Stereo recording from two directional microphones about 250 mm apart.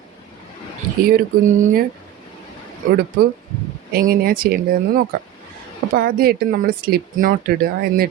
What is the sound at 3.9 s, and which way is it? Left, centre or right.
Speech, right.